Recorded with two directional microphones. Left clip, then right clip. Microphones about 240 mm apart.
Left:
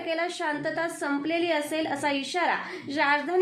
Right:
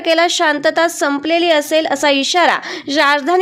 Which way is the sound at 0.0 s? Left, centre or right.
Right.